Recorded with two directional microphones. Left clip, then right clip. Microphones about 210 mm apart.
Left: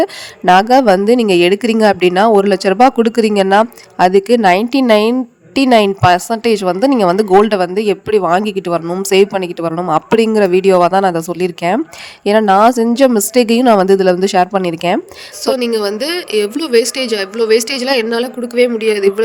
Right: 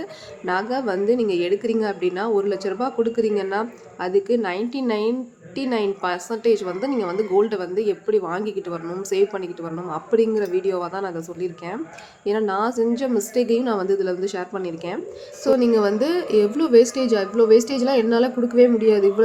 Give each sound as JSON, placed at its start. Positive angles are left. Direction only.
{"t": 0.0, "sound": "a woman's voice", "side_deg": 50}